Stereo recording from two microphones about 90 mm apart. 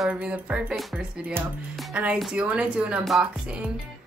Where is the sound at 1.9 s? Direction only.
15° right (ahead or behind).